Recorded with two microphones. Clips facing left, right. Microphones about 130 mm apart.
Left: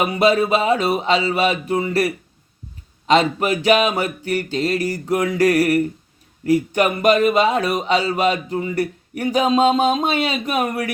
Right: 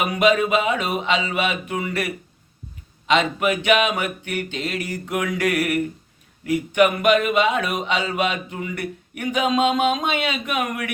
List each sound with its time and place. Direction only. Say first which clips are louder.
0.1 s a man's voice: left 2 dB; 35° left (ahead or behind)